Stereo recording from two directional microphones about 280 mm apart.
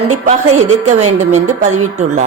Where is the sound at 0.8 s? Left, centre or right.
Right.